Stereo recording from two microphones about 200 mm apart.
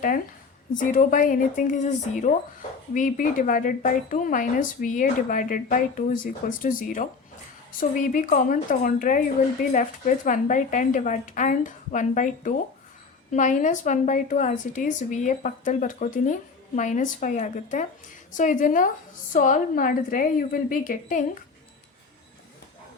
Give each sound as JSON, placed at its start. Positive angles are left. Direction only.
{"t": 0.8, "sound": "a woman's voice", "side_deg": 40}